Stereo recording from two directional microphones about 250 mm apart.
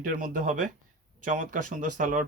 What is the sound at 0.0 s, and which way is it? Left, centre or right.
Speech, right.